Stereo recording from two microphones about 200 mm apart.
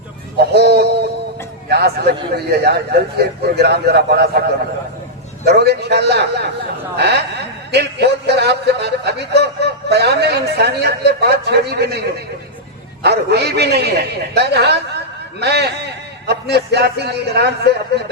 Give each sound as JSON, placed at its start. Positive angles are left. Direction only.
{"t": 0.3, "sound": "a sound", "side_deg": -55}
{"t": 1.7, "sound": "a man's voice", "side_deg": -55}
{"t": 5.5, "sound": "a man's voice", "side_deg": -55}